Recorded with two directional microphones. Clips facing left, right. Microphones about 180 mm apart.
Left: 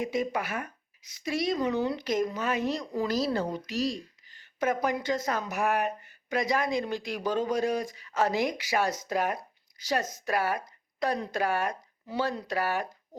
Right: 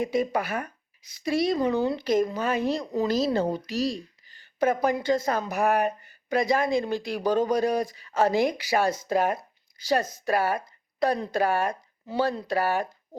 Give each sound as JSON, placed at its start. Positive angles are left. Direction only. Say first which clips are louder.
{"t": 0.0, "sound": "speech", "louder": "right 4 dB", "side_deg": -35}